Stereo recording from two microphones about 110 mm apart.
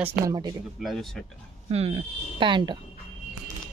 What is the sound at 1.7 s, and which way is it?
Speech, 60° right (ahead or behind).